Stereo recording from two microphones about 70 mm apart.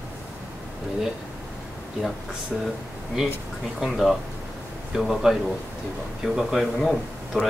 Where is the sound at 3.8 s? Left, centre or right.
Centre.